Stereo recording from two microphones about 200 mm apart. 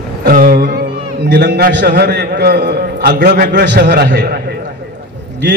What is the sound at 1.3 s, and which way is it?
A man's voice, 50° right (ahead or behind).